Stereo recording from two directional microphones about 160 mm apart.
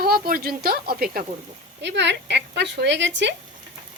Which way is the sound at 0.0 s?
70° right (ahead or behind).